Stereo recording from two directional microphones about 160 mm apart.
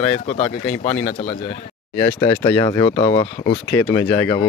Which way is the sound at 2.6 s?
25° left (ahead or behind).